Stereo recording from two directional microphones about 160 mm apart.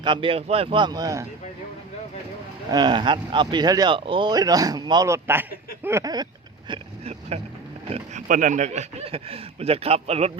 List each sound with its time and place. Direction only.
0.0 s speech: 30° right (ahead or behind)
2.6 s speech: 25° right (ahead or behind)
6.7 s speech: 40° right (ahead or behind)